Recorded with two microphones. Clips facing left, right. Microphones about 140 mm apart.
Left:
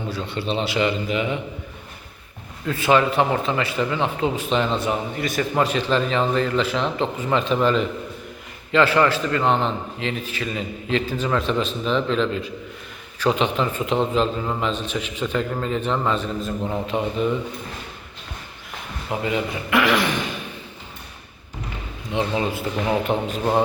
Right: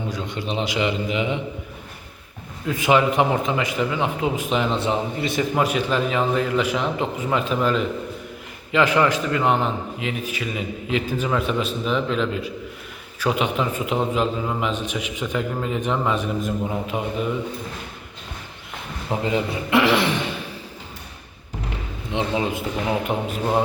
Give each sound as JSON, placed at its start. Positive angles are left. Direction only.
{"t": 0.1, "sound": "a man's voice", "side_deg": -15}
{"t": 2.6, "sound": "a man's voice", "side_deg": -15}
{"t": 4.8, "sound": "a man's voice", "side_deg": -25}
{"t": 5.5, "sound": "a man's voice", "side_deg": -10}
{"t": 8.7, "sound": "a man's voice", "side_deg": -15}
{"t": 19.2, "sound": "a man's voice", "side_deg": -25}
{"t": 22.9, "sound": "a man's voice", "side_deg": -10}